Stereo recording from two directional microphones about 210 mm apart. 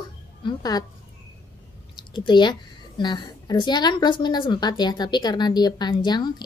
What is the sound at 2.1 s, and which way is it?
A woman's voice, 20° left (ahead or behind).